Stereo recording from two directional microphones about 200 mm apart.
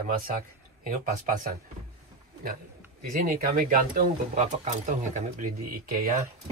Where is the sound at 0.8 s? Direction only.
40° right (ahead or behind).